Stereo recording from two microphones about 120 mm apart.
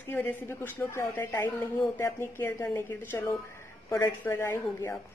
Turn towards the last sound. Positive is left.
turn(degrees=20)  # may be behind; listen again after turning